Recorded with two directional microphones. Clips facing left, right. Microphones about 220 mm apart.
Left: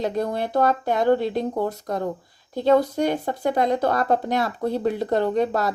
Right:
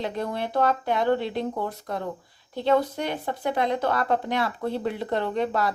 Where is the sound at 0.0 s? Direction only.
40° left (ahead or behind).